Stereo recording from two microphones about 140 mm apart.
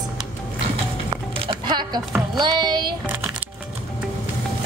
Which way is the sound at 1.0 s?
30° right (ahead or behind).